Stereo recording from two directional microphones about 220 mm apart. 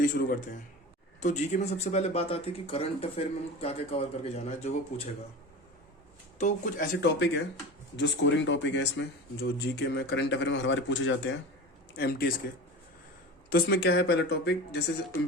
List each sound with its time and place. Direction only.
0.0 s speech: 40° left (ahead or behind)
6.4 s speech: 40° left (ahead or behind)
7.9 s speech: 55° left (ahead or behind)
11.9 s speech: 45° left (ahead or behind)
13.5 s speech: 45° left (ahead or behind)